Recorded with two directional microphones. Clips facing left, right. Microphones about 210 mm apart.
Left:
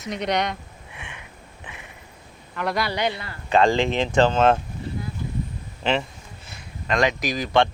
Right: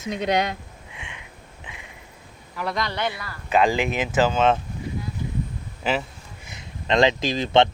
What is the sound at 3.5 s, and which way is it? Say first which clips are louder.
Speech: left 2 dB; 5° right (ahead or behind).